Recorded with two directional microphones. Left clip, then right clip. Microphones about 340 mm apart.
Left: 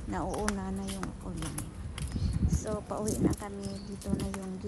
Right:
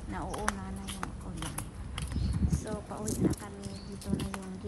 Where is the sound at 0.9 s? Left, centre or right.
Centre.